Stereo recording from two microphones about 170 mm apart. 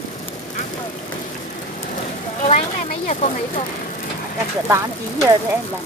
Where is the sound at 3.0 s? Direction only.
40° left (ahead or behind).